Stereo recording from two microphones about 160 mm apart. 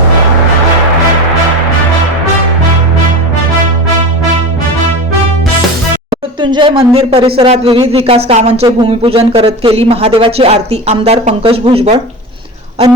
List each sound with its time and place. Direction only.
6.4 s speech: 30° right (ahead or behind)
8.6 s speech: 30° right (ahead or behind)